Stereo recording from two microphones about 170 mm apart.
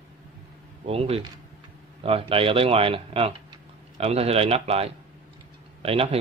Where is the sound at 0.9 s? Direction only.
35° right (ahead or behind).